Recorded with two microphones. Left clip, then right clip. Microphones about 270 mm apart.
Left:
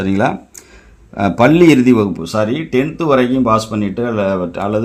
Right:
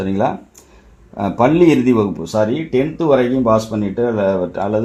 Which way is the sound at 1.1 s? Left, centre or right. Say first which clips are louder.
Left 3 dB; left.